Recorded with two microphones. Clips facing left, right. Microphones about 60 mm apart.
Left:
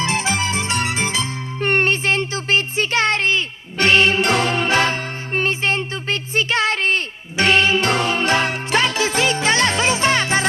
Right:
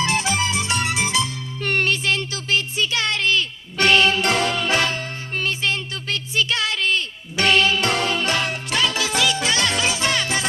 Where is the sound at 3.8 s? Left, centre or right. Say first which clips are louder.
Left 2 dB; left.